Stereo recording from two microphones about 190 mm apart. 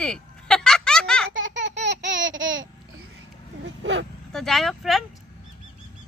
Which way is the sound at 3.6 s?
70° right (ahead or behind).